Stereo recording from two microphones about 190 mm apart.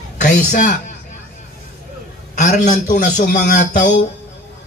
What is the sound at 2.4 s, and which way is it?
Speech, 40° left (ahead or behind).